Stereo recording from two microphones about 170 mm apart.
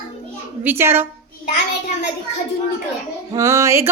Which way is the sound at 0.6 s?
15° right (ahead or behind).